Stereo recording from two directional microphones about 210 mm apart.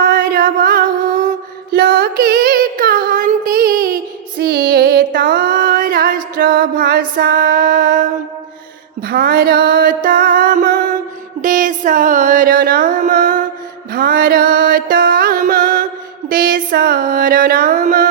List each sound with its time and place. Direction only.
0.0 s music: 45° right (ahead or behind)
1.7 s a sound: 45° right (ahead or behind)
4.4 s music: 45° right (ahead or behind)
7.2 s female singing: 45° right (ahead or behind)
9.0 s mantra: 45° right (ahead or behind)
11.4 s music: 40° right (ahead or behind)